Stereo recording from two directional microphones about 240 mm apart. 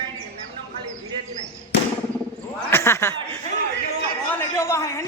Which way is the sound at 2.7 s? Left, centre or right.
Centre.